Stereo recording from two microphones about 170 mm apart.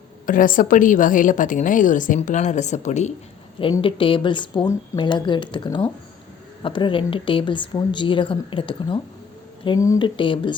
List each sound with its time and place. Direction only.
0.3 s a woman's voice: 55° left (ahead or behind)
3.6 s speech: 30° left (ahead or behind)
9.6 s speech: 20° left (ahead or behind)
10.2 s speech: 30° left (ahead or behind)